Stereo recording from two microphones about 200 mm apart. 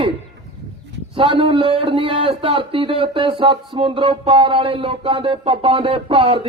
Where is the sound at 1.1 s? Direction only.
25° right (ahead or behind).